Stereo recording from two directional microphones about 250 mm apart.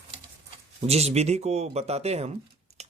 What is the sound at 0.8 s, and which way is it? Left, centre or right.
Speech, right.